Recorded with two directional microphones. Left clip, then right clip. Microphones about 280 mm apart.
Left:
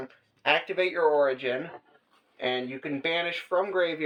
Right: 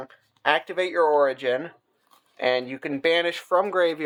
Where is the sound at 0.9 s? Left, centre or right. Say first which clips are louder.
Right 4 dB; right.